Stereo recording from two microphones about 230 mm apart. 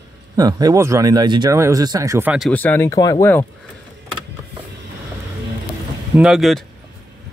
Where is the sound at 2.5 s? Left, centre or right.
Centre.